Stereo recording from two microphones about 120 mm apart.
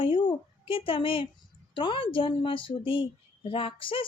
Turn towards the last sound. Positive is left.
turn(degrees=45)  # may be behind; listen again after turning